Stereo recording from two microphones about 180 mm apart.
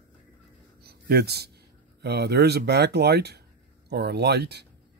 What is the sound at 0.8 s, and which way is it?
Speech, 60° right (ahead or behind).